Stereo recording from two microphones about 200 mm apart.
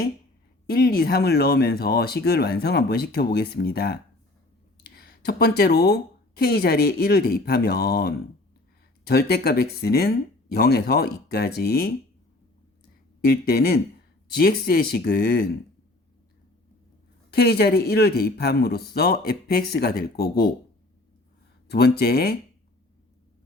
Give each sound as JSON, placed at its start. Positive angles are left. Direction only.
{"t": 0.7, "sound": "speech", "side_deg": 50}
{"t": 13.2, "sound": "speech", "side_deg": 50}
{"t": 17.3, "sound": "speech", "side_deg": 50}
{"t": 21.7, "sound": "speech", "side_deg": 55}